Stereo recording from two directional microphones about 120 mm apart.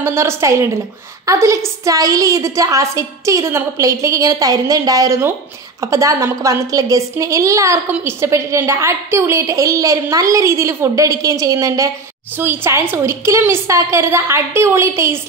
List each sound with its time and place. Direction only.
0.0 s a woman's voice: 20° right (ahead or behind)